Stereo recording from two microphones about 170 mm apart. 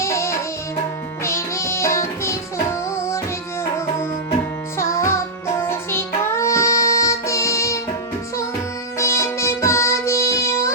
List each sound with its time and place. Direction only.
0.0 s music: 15° left (ahead or behind)
4.8 s music: 15° left (ahead or behind)
9.0 s music: 15° left (ahead or behind)